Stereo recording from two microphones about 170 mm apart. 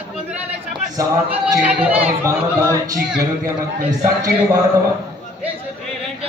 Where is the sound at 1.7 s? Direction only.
10° right (ahead or behind).